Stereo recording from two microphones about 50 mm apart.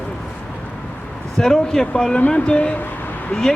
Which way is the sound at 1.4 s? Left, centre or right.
Centre.